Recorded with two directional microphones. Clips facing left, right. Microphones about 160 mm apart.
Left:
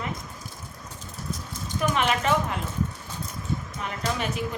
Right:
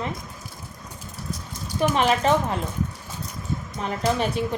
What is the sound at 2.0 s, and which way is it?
Speech, 35° right (ahead or behind).